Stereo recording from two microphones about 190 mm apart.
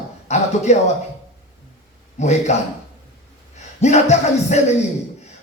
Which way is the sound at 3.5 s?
35° left (ahead or behind).